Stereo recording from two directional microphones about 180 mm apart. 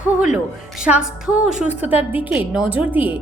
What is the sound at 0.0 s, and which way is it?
A woman's voice, 5° right (ahead or behind).